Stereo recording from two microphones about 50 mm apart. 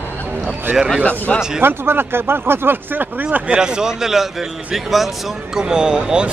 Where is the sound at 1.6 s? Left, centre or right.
Right.